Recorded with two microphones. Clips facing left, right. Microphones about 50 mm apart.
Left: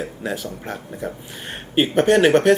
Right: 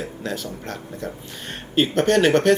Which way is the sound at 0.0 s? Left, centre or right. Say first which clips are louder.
Left 2 dB; centre.